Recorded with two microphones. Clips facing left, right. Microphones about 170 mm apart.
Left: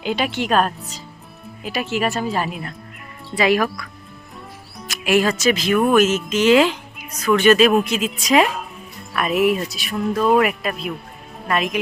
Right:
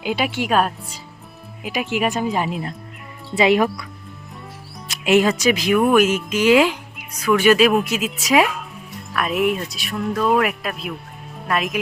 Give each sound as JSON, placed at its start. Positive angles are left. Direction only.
{"t": 0.0, "sound": "speech", "side_deg": -10}
{"t": 4.9, "sound": "music", "side_deg": -20}
{"t": 5.4, "sound": "speech", "side_deg": -15}